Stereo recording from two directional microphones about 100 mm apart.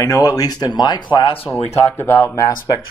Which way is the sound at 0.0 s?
35° left (ahead or behind).